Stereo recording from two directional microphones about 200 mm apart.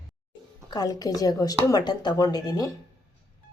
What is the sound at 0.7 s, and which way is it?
A woman's voice, 20° left (ahead or behind).